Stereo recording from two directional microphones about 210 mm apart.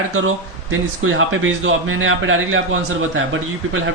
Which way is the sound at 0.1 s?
75° right (ahead or behind).